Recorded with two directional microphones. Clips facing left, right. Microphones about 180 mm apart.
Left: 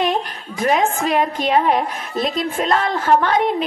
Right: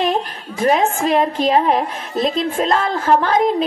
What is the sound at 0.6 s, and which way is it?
A woman's voice, 30° right (ahead or behind).